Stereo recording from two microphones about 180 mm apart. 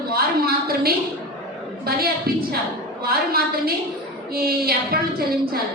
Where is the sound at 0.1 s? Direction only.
55° right (ahead or behind).